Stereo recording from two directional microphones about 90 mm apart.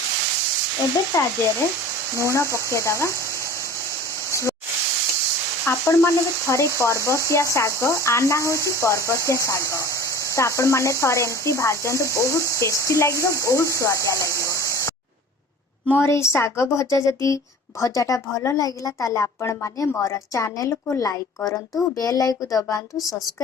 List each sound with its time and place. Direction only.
1.1 s a woman's voice: 35° left (ahead or behind)
4.3 s hiss: 35° left (ahead or behind)
5.6 s a woman's voice: 30° left (ahead or behind)
15.9 s a woman's voice: 25° left (ahead or behind); by 22.8 s 40° left (ahead or behind)